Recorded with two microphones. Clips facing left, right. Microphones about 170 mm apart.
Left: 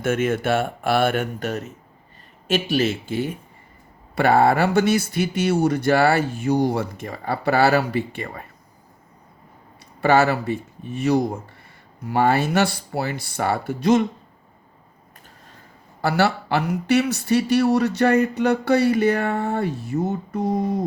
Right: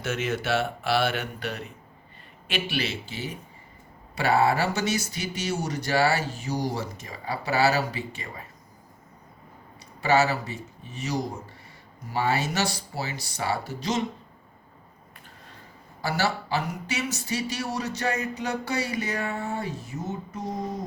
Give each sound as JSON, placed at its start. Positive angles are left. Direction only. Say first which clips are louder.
{"t": 0.0, "sound": "speech", "louder": "left 8 dB", "side_deg": 50}
{"t": 10.0, "sound": "speech", "louder": "left 5 dB", "side_deg": 55}
{"t": 16.0, "sound": "speech", "louder": "left 7 dB", "side_deg": 60}